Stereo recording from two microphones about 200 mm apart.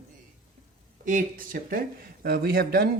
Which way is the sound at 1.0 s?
40° right (ahead or behind).